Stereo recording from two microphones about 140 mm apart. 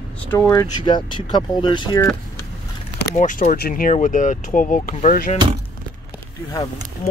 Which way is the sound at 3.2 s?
60° left (ahead or behind).